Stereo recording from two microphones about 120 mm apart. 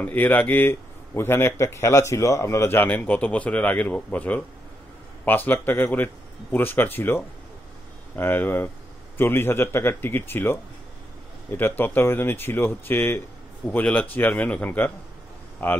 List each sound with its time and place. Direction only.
0.0 s a man's voice: 15° left (ahead or behind)